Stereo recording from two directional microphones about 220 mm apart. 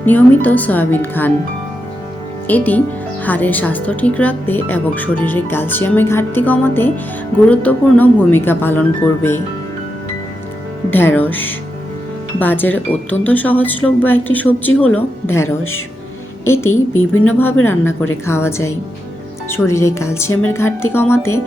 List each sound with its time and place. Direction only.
0.0 s speech: 10° left (ahead or behind)
2.5 s speech: 10° left (ahead or behind)
10.9 s speech: 10° left (ahead or behind)